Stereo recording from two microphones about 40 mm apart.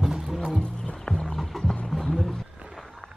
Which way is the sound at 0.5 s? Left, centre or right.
Centre.